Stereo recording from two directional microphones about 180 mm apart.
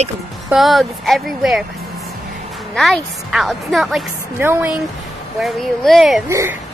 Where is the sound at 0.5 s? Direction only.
Centre (ahead or behind).